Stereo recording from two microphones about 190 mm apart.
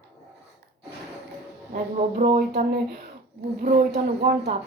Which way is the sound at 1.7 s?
50° right (ahead or behind).